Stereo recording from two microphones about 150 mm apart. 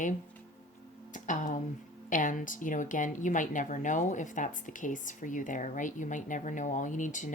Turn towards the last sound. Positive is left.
turn(degrees=55)  # may be behind; listen again after turning